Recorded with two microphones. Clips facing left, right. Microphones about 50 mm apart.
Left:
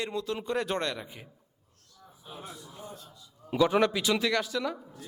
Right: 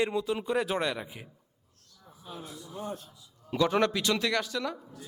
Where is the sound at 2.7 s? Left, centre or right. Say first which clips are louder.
Right 7 dB; right.